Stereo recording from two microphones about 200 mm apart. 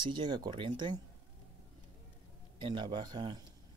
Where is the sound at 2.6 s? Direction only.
25° right (ahead or behind).